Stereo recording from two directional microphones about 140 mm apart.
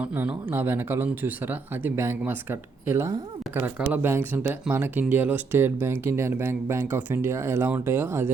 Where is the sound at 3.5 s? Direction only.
15° right (ahead or behind).